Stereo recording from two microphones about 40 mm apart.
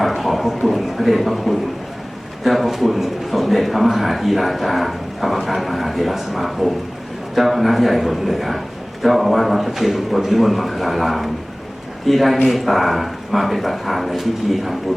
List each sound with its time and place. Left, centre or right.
0.0 s a man's voice: centre